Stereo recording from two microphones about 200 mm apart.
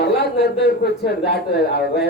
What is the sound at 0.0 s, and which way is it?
A man's voice, 55° left (ahead or behind).